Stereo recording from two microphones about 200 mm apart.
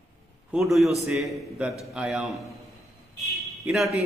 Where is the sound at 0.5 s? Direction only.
Centre (ahead or behind).